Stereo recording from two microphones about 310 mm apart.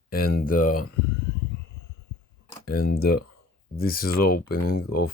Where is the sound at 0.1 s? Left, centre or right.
Left.